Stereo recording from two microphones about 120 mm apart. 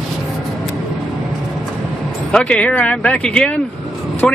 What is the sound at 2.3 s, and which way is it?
Speech, 10° left (ahead or behind).